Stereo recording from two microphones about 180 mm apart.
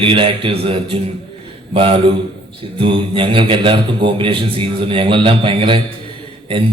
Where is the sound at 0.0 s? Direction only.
30° right (ahead or behind).